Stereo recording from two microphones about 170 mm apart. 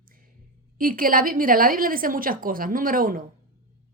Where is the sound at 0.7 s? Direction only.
55° right (ahead or behind).